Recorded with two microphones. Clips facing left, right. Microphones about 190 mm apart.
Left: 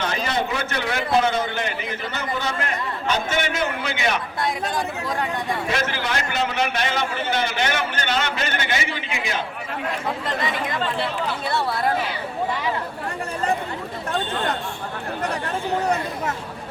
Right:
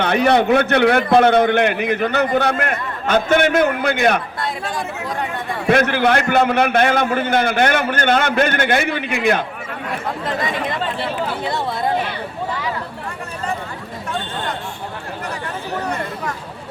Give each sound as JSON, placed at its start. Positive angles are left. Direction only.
{"t": 0.0, "sound": "a man's voice", "side_deg": -60}
{"t": 5.6, "sound": "a man's voice", "side_deg": -55}
{"t": 11.4, "sound": "speech", "side_deg": -20}